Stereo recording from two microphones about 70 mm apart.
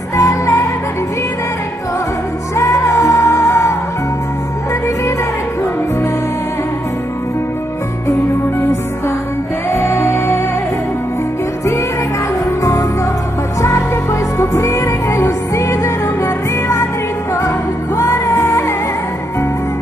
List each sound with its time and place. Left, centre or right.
0.1 s music: left
2.5 s music: left
8.1 s music: left
14.4 s music: left